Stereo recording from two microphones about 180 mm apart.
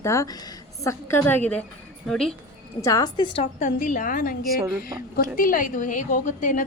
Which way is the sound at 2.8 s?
20° left (ahead or behind).